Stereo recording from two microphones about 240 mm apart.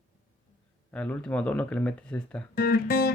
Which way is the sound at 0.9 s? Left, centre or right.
Centre.